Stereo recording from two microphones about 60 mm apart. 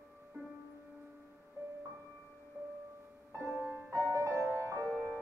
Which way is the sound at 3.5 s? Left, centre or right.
Right.